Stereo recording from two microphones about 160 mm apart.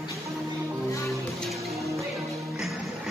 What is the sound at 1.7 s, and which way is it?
Music, 20° right (ahead or behind).